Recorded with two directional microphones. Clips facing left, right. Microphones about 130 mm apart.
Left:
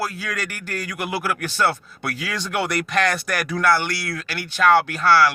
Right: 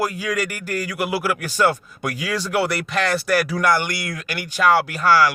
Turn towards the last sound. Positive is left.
turn(degrees=-10)  # may be behind; listen again after turning